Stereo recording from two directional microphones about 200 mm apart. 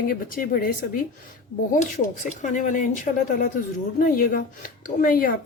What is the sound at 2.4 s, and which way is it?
Speech, 40° left (ahead or behind).